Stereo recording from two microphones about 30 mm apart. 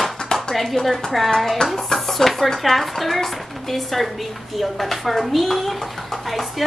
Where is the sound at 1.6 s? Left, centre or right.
Left.